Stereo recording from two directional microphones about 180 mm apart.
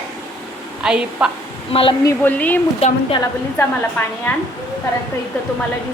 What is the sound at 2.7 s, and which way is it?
Speech, 35° left (ahead or behind).